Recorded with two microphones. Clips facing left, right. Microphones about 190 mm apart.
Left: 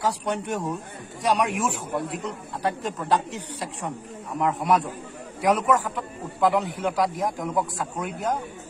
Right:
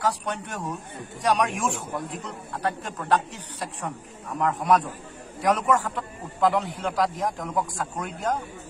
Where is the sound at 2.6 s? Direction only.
15° left (ahead or behind).